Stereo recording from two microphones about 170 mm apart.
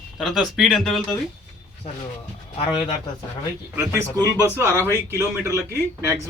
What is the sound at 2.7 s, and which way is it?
Speech, 30° left (ahead or behind).